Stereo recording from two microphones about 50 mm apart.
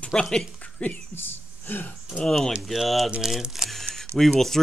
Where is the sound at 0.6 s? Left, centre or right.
Left.